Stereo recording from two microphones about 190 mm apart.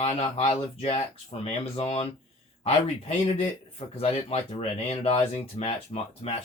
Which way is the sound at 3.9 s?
35° left (ahead or behind).